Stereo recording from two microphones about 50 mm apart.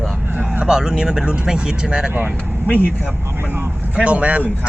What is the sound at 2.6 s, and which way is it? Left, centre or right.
Speech, left.